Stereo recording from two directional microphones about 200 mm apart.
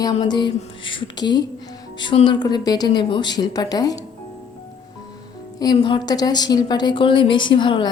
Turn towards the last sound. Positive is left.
turn(degrees=25)  # may be behind; listen again after turning